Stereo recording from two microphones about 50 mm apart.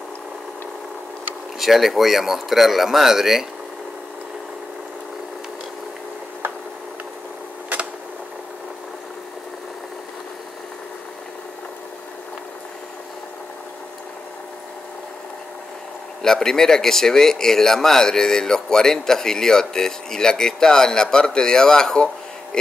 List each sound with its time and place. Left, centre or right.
1.6 s speech: centre
7.7 s a sound: right
16.2 s speech: centre